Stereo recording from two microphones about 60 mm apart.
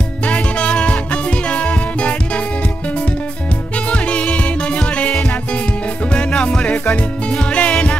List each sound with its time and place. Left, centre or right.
0.3 s music: centre
3.9 s music: left
6.1 s music: centre